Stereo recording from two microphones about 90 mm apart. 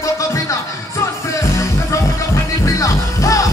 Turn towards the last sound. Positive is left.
turn(degrees=40)  # may be behind; listen again after turning